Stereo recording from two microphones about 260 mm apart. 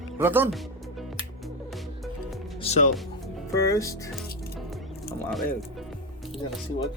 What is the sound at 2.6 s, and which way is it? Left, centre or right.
Speech, left.